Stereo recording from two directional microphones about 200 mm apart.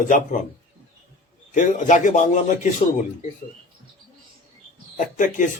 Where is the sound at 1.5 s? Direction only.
40° left (ahead or behind).